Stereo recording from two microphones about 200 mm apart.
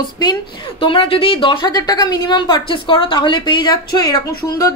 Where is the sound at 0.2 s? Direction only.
25° left (ahead or behind).